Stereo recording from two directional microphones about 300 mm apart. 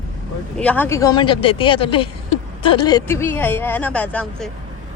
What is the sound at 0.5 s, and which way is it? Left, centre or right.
Speech, centre.